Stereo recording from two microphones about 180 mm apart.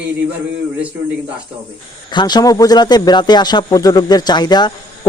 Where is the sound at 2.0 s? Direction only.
25° left (ahead or behind).